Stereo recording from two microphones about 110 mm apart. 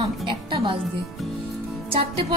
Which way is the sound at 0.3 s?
50° right (ahead or behind).